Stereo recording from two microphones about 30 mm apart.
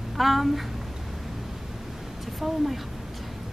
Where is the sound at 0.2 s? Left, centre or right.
Centre.